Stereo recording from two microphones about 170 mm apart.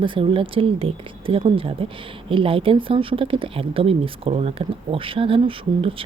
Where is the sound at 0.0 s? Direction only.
30° right (ahead or behind).